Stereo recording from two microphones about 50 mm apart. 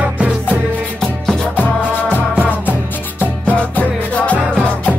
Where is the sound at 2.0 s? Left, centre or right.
Left.